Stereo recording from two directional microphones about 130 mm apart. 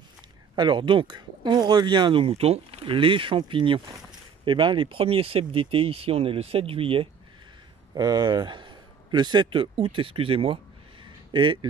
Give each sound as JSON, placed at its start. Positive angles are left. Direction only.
{"t": 0.6, "sound": "speech", "side_deg": -40}
{"t": 7.9, "sound": "a man's voice", "side_deg": -35}